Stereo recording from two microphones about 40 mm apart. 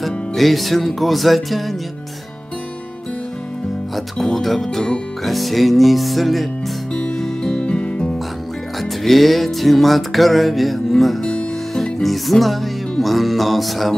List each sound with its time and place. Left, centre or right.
0.0 s music: centre
3.9 s speech: centre
5.2 s music: centre
7.2 s music: centre
7.5 s music: left
9.0 s music: centre
11.7 s speech: centre
13.0 s music: centre